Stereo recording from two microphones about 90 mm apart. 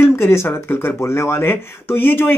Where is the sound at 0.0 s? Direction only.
25° left (ahead or behind).